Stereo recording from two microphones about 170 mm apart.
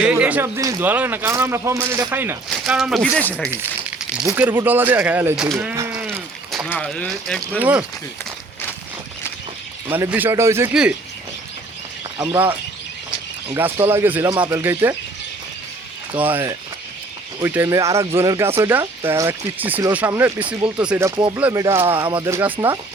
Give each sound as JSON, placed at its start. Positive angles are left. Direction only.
{"t": 0.0, "sound": "speech", "side_deg": -5}
{"t": 2.6, "sound": "speech", "side_deg": -5}
{"t": 3.5, "sound": "crumpling", "side_deg": -10}
{"t": 4.3, "sound": "speech", "side_deg": -10}
{"t": 7.6, "sound": "speech", "side_deg": -10}
{"t": 9.9, "sound": "speech", "side_deg": -10}
{"t": 12.2, "sound": "speech", "side_deg": -10}
{"t": 16.2, "sound": "speech", "side_deg": -10}
{"t": 21.9, "sound": "speech", "side_deg": -30}
{"t": 22.3, "sound": "speech", "side_deg": -15}